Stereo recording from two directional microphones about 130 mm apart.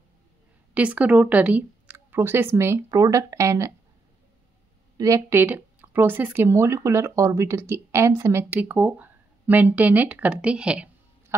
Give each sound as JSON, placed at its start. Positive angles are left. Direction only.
{"t": 0.7, "sound": "speech", "side_deg": -10}
{"t": 4.9, "sound": "a woman's voice", "side_deg": -25}
{"t": 5.4, "sound": "speech", "side_deg": -15}